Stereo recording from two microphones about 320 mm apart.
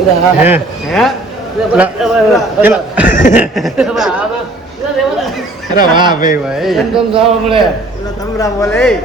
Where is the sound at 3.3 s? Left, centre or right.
Centre.